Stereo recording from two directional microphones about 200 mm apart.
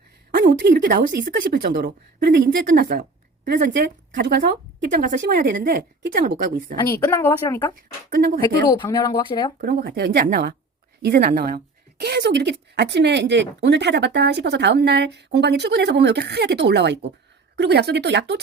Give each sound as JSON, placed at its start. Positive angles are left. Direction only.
{"t": 0.3, "sound": "speech", "side_deg": -50}
{"t": 6.8, "sound": "a woman's voice", "side_deg": 15}
{"t": 8.1, "sound": "speech", "side_deg": -50}
{"t": 8.7, "sound": "speech", "side_deg": 20}
{"t": 9.6, "sound": "a woman's voice", "side_deg": -50}